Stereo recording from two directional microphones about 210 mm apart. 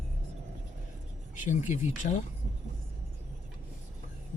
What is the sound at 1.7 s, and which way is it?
Speech, 35° left (ahead or behind).